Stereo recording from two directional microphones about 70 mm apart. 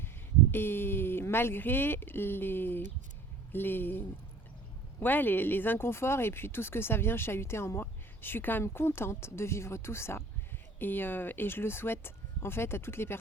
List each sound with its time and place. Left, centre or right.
0.5 s speech: left